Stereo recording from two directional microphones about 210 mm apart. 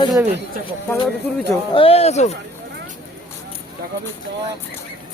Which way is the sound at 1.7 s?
25° left (ahead or behind).